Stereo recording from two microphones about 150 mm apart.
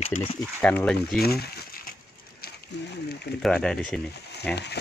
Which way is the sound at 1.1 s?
90° left.